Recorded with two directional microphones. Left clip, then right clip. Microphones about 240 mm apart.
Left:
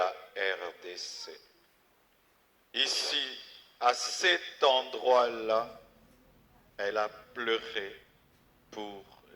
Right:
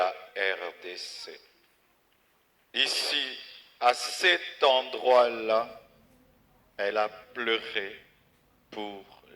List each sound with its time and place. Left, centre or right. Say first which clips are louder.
0.0 s music: right 3 dB; right
2.7 s a man's voice: right 3 dB; right
8.7 s a sound: right 4 dB; right